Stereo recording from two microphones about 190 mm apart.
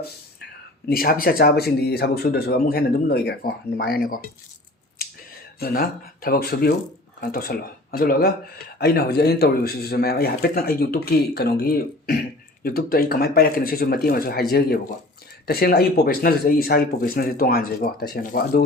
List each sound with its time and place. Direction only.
0.9 s speech: 50° left (ahead or behind)
5.5 s speech: 50° left (ahead or behind)
15.4 s speech: 50° left (ahead or behind)